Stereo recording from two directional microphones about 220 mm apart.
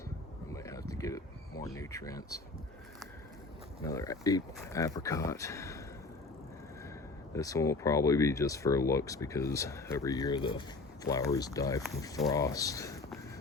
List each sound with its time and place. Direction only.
0.5 s a sound: 15° left (ahead or behind)
3.8 s speech: 15° left (ahead or behind)
7.3 s speech: 15° left (ahead or behind)